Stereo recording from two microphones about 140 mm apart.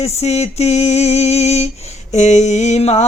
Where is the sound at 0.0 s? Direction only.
50° left (ahead or behind).